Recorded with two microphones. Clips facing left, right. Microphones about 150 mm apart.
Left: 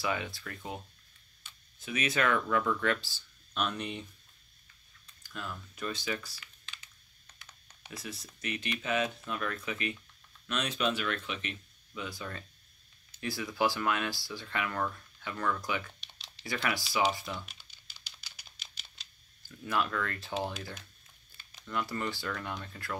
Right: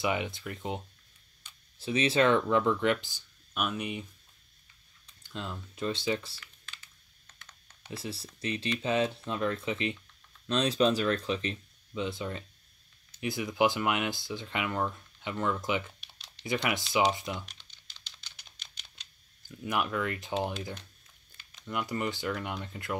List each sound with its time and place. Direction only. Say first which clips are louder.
0.0 s speech: right 3 dB; 20° right (ahead or behind)
5.2 s speech: right 3 dB; 25° right (ahead or behind)
7.9 s speech: right 5 dB; 30° right (ahead or behind)
16.0 s computer keyboard: left 1 dB; centre (ahead or behind)
17.1 s speech: right 3 dB; 20° right (ahead or behind)
17.5 s a sound: even; 10° left (ahead or behind)
19.4 s speech: right 1 dB; 15° right (ahead or behind)